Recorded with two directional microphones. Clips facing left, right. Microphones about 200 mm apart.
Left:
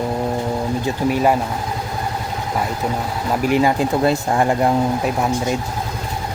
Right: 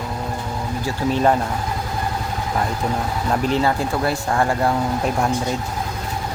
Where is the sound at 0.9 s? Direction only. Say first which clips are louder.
Even; 10° left (ahead or behind).